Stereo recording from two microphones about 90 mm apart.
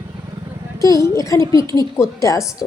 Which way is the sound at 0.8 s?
40° left (ahead or behind).